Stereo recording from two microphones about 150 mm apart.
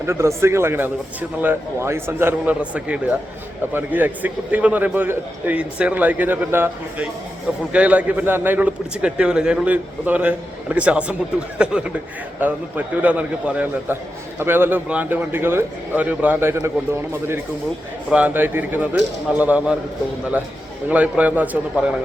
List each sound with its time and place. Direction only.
0.0 s a man's voice: 20° right (ahead or behind)
18.1 s a man's voice: 10° right (ahead or behind)
20.9 s a man's voice: 10° right (ahead or behind)